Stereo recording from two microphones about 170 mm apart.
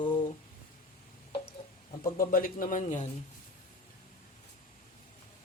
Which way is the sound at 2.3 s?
55° left (ahead or behind).